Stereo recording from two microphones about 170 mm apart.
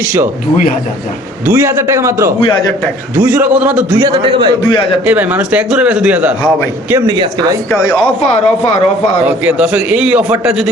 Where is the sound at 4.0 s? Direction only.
30° right (ahead or behind).